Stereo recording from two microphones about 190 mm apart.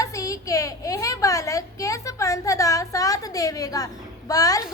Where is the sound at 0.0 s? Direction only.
15° left (ahead or behind).